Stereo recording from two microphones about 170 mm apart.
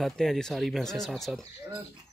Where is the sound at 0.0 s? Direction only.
Centre (ahead or behind).